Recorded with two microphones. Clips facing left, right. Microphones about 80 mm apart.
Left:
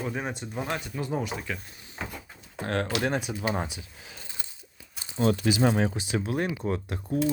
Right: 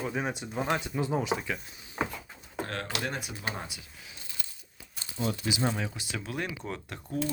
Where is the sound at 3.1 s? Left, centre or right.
Left.